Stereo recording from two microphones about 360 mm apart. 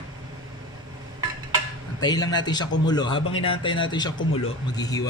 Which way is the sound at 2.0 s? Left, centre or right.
Centre.